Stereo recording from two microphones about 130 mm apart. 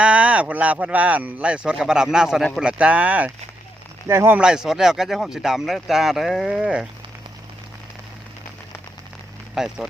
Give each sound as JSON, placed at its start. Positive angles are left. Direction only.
{"t": 0.0, "sound": "speech", "side_deg": -10}
{"t": 4.4, "sound": "speech", "side_deg": -5}
{"t": 9.6, "sound": "speech", "side_deg": -5}